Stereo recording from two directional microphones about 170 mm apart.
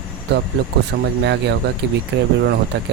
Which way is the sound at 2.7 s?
90° right.